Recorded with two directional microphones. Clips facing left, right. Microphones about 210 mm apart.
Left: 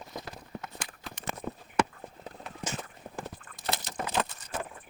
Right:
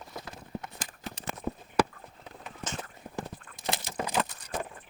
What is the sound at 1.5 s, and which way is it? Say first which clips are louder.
Clip-clop: right 7 dB; 10° right (ahead or behind).